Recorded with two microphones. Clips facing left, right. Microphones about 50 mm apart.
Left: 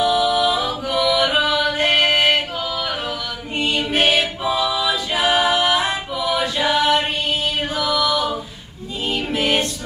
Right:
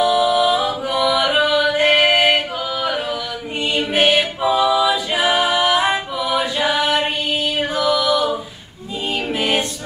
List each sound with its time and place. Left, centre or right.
0.1 s a capella: centre
1.0 s music: centre
2.8 s a capella: centre
5.8 s music: centre